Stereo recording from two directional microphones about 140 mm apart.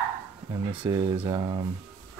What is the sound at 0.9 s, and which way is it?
Speech, 25° right (ahead or behind).